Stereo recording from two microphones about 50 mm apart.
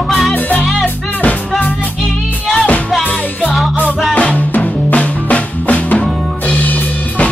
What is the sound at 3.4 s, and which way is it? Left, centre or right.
Music, centre.